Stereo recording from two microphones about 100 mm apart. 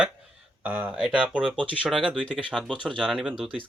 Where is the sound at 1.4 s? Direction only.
55° right (ahead or behind).